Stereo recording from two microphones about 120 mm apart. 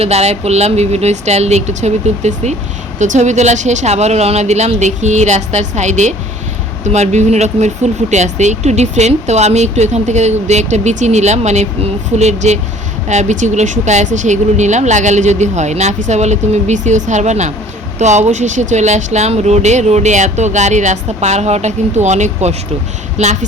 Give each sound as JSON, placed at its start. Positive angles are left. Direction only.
{"t": 0.0, "sound": "speech", "side_deg": -60}
{"t": 3.0, "sound": "speech", "side_deg": -80}
{"t": 4.8, "sound": "speech", "side_deg": -85}